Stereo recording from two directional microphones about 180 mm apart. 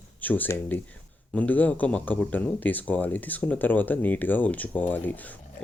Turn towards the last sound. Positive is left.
turn(degrees=10)  # may be behind; listen again after turning